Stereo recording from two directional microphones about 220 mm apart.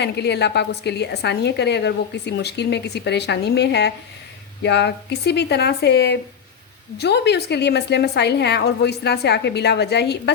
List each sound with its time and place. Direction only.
0.0 s a woman's voice: 50° left (ahead or behind)